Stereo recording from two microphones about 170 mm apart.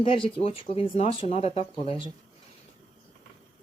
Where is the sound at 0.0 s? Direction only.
30° left (ahead or behind).